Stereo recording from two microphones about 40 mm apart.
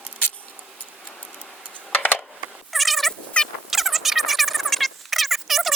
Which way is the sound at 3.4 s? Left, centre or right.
Left.